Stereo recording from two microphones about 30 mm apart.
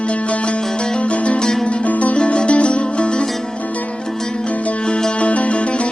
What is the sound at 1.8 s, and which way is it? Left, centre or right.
Music, left.